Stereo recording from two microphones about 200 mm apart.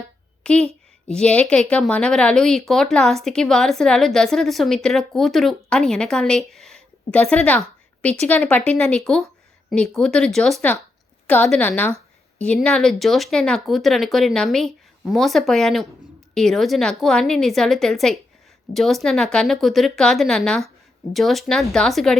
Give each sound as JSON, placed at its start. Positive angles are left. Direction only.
{"t": 0.5, "sound": "speech", "side_deg": -30}
{"t": 1.0, "sound": "a woman's voice", "side_deg": 5}